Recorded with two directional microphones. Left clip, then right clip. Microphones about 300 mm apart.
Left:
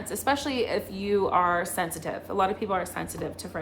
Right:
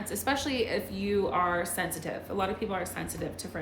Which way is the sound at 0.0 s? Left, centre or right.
Centre.